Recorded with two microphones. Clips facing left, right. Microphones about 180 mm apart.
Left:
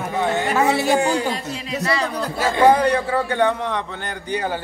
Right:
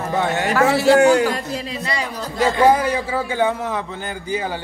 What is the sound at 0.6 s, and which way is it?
Speech, 20° left (ahead or behind).